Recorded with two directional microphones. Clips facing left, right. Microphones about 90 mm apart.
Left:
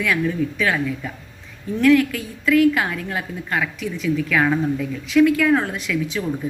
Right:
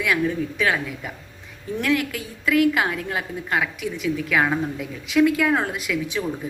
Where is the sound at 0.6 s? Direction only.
20° right (ahead or behind).